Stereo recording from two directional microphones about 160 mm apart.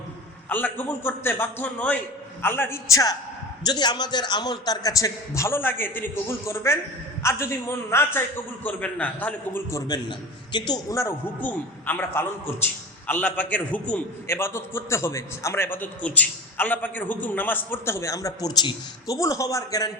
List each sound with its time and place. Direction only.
0.4 s a man's voice: 10° left (ahead or behind)